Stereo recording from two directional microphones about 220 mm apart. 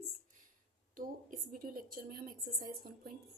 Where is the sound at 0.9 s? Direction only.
40° right (ahead or behind).